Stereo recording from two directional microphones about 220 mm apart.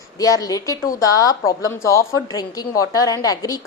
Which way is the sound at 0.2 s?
15° left (ahead or behind).